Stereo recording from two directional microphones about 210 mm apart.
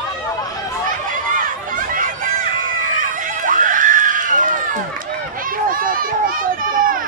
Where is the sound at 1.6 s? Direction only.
40° right (ahead or behind).